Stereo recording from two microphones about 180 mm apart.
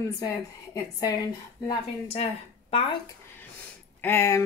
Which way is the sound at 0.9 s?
20° left (ahead or behind).